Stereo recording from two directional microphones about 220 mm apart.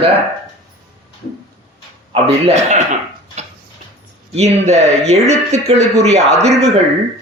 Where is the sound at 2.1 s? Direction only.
30° right (ahead or behind).